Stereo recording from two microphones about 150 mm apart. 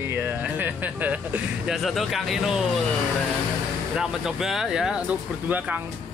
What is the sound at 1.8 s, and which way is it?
Speech, centre (ahead or behind).